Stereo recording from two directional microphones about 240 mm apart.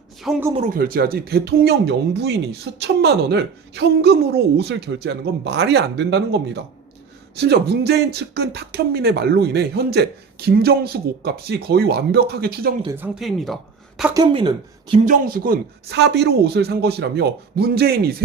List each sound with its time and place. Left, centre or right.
0.2 s speech: centre
0.7 s speech: right
12.8 s speech: centre
13.1 s speech: centre
14.1 s speech: centre
15.0 s speech: right